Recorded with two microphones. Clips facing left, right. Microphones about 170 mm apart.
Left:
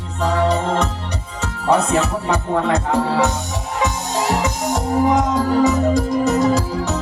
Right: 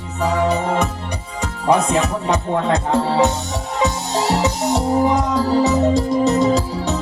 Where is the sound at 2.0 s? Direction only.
15° right (ahead or behind).